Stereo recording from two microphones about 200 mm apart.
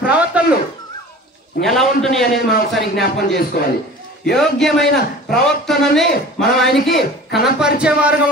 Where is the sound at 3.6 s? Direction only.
50° left (ahead or behind).